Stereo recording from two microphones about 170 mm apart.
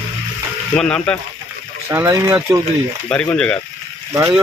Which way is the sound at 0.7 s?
5° left (ahead or behind).